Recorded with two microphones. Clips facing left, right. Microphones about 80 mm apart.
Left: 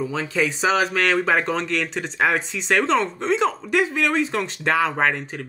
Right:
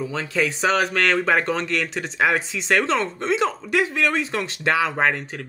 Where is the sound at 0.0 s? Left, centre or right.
Centre.